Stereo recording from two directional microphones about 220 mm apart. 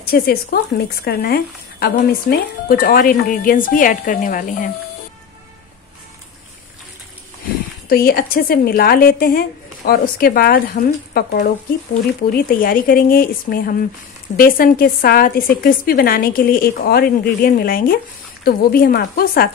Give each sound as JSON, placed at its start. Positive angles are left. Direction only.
{"t": 0.0, "sound": "a woman's voice", "side_deg": 45}
{"t": 7.9, "sound": "a woman's voice", "side_deg": 45}